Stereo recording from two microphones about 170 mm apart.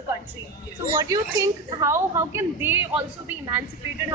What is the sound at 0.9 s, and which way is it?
A woman's voice, 20° right (ahead or behind).